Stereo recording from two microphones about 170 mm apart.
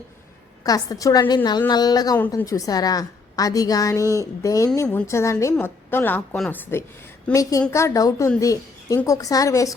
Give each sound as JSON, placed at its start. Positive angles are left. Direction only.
{"t": 0.6, "sound": "a woman's voice", "side_deg": 20}
{"t": 7.7, "sound": "a woman's voice", "side_deg": 15}